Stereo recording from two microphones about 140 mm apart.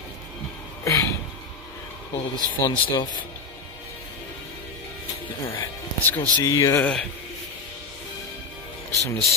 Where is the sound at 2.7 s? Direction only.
30° left (ahead or behind).